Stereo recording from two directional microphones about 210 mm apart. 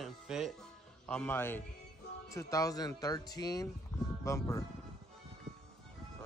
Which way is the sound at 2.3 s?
15° left (ahead or behind).